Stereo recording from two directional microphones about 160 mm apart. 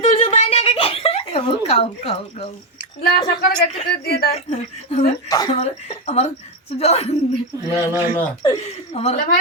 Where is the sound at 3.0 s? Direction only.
70° left (ahead or behind).